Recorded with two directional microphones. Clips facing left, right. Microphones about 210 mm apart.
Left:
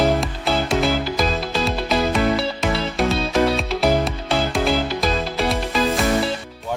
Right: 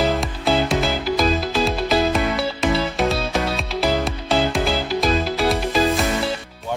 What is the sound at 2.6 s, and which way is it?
Music, centre (ahead or behind).